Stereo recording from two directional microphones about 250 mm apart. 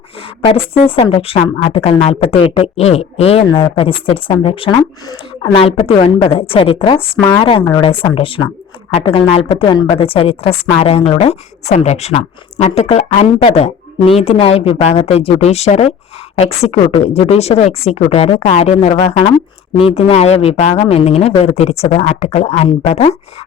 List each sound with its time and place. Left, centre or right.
0.2 s a woman's voice: left